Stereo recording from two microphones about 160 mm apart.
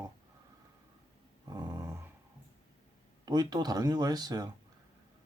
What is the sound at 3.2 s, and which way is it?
Speech, 25° right (ahead or behind).